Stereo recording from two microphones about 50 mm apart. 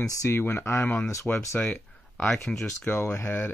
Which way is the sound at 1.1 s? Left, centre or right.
Left.